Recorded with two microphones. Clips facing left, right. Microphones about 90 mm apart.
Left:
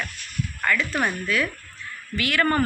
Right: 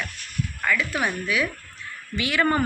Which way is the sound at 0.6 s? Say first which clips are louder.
Left 1 dB; 5° right (ahead or behind).